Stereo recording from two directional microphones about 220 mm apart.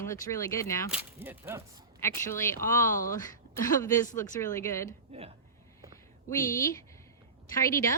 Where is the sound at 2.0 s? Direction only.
10° left (ahead or behind).